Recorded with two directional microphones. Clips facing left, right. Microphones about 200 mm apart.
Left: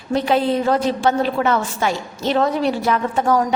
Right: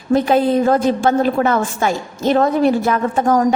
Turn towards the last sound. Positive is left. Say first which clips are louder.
# right 3 dB
turn(degrees=-50)  # may be behind; listen again after turning